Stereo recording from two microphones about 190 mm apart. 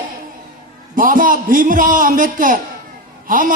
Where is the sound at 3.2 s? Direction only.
45° right (ahead or behind).